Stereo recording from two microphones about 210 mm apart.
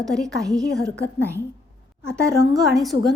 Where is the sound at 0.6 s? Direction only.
15° right (ahead or behind).